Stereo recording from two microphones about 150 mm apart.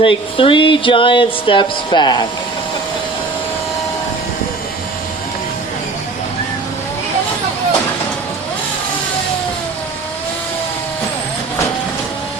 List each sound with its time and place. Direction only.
0.0 s speech: 35° left (ahead or behind)